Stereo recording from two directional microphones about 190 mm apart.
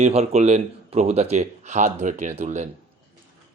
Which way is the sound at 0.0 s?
35° right (ahead or behind).